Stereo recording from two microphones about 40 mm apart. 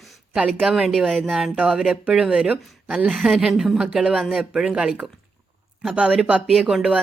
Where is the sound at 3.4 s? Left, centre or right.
Centre.